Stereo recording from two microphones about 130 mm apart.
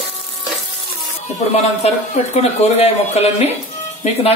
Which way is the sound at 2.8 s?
55° left (ahead or behind).